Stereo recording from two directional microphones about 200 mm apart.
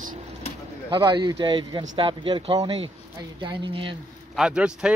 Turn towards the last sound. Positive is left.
turn(degrees=-5)  # may be behind; listen again after turning